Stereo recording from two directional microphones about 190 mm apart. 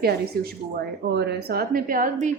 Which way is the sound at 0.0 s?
55° right (ahead or behind).